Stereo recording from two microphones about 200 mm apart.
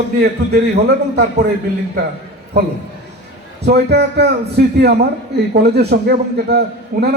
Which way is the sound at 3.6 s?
55° right (ahead or behind).